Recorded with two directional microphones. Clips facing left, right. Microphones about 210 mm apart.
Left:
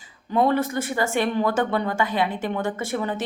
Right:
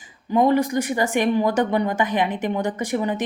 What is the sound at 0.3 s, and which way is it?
Speech, 15° right (ahead or behind).